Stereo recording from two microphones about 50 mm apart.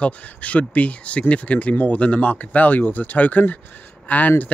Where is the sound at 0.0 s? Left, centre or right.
Left.